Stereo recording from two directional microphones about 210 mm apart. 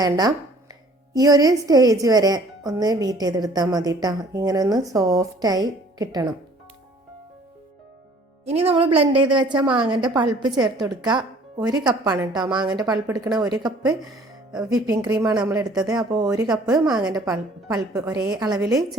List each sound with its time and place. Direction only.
0.0 s a woman's voice: 20° right (ahead or behind)
8.4 s a woman's voice: 25° right (ahead or behind)
16.7 s speech: 5° right (ahead or behind)
17.9 s a woman's voice: 15° right (ahead or behind)